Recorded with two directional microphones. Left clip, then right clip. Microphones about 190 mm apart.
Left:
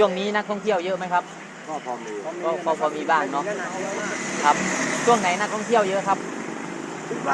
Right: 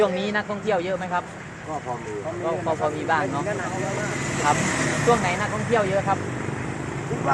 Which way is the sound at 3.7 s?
55° right (ahead or behind).